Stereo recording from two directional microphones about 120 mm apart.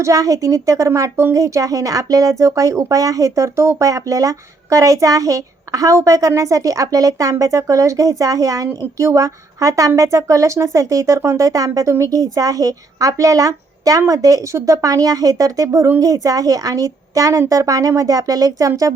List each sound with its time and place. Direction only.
0.0 s a woman's voice: 30° right (ahead or behind)